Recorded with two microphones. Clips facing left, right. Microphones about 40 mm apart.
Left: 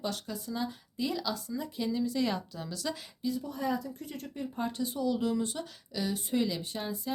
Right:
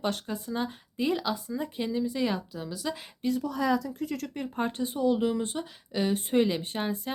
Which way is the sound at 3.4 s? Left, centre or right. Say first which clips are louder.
Right 8 dB; right.